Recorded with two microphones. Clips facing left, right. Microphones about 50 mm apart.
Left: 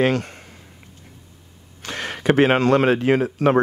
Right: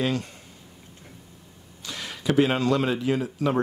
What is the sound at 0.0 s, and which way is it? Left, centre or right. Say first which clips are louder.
Speech: left 7 dB; left.